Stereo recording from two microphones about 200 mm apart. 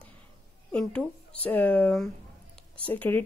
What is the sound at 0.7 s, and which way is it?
A woman's voice, 5° left (ahead or behind).